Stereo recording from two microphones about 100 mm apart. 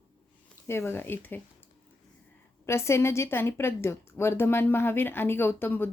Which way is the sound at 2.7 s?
30° left (ahead or behind).